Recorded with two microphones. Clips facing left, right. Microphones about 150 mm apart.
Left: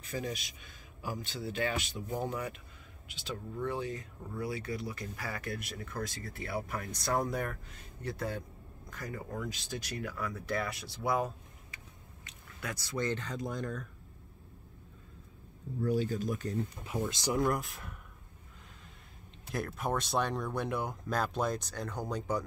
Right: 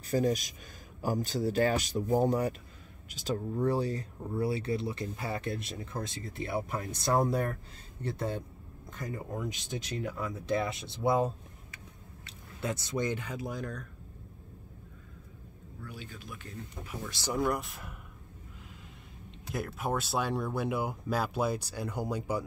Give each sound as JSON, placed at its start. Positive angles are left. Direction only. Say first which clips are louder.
{"t": 0.0, "sound": "speech", "louder": "right 9 dB", "side_deg": -40}
{"t": 15.8, "sound": "speech", "louder": "left 15 dB", "side_deg": 40}
{"t": 16.8, "sound": "speech", "louder": "left 6 dB", "side_deg": 20}
{"t": 17.3, "sound": "speech", "louder": "right 1 dB", "side_deg": 0}
{"t": 19.5, "sound": "speech", "louder": "right 1 dB", "side_deg": 0}